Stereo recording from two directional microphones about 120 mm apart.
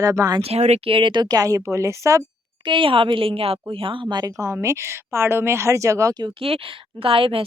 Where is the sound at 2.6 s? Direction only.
45° right (ahead or behind).